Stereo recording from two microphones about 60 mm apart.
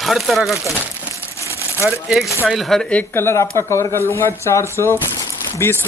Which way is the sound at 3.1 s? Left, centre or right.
Left.